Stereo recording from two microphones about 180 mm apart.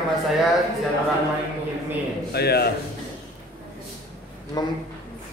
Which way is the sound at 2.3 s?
60° left (ahead or behind).